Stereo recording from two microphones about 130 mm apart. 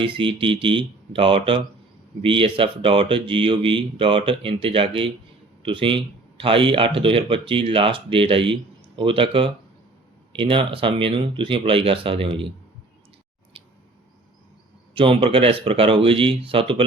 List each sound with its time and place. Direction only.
0.0 s speech: 40° right (ahead or behind)
14.9 s speech: 40° right (ahead or behind)